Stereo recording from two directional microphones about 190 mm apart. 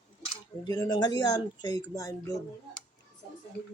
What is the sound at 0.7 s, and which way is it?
Speech, 20° left (ahead or behind).